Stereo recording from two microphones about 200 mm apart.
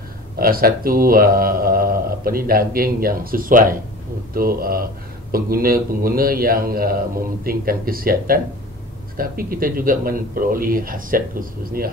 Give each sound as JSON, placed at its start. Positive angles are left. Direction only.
{"t": 0.4, "sound": "speech", "side_deg": -45}